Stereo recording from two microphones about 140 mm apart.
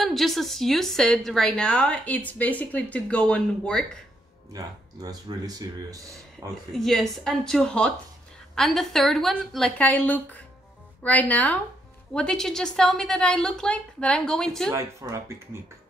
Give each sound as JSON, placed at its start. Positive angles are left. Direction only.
{"t": 0.0, "sound": "a woman's voice", "side_deg": 0}
{"t": 4.5, "sound": "speech", "side_deg": -25}
{"t": 6.5, "sound": "a woman's voice", "side_deg": 0}
{"t": 14.7, "sound": "speech", "side_deg": -20}